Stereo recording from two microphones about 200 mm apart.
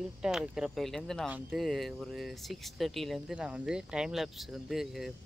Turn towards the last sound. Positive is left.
turn(degrees=0)  # may be behind; listen again after turning